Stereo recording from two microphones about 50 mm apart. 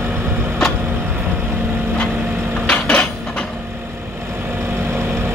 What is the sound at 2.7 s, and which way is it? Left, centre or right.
Cutlery, left.